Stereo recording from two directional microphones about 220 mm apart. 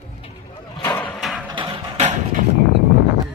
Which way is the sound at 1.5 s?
20° right (ahead or behind).